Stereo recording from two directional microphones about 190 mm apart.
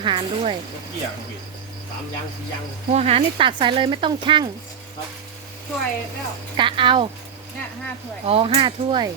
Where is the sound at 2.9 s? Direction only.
35° right (ahead or behind).